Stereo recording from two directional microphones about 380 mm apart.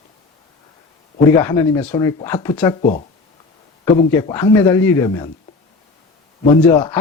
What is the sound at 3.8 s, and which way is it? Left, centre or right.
Speech, centre.